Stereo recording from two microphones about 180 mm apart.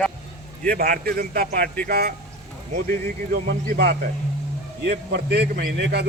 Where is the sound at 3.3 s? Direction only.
65° right (ahead or behind).